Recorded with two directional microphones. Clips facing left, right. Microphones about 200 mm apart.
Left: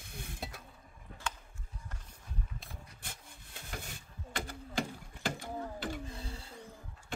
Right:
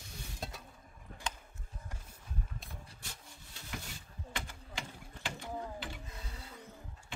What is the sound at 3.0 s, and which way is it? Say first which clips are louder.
Rub: left 1 dB; 55° left (ahead or behind).